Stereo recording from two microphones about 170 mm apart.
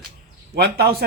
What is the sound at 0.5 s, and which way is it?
Speech, 70° right (ahead or behind).